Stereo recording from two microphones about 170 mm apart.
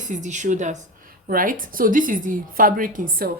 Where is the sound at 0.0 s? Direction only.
45° right (ahead or behind).